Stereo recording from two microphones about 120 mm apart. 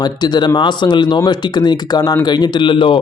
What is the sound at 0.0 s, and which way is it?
Speech, 35° left (ahead or behind).